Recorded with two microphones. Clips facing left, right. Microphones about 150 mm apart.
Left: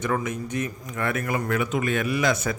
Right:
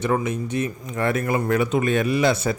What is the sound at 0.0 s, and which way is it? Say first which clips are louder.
A man's voice: right 4 dB; 25° right (ahead or behind).